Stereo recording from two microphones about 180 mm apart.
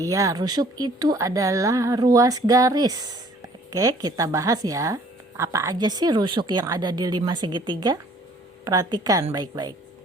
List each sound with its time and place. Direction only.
0.0 s speech: 20° right (ahead or behind)